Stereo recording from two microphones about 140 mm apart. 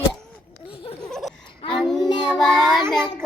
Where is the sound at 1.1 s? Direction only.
5° left (ahead or behind).